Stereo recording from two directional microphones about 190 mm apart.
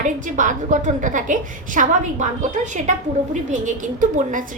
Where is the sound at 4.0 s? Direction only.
45° right (ahead or behind).